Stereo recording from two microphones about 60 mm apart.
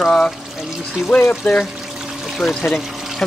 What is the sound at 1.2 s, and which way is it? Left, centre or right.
Speech, left.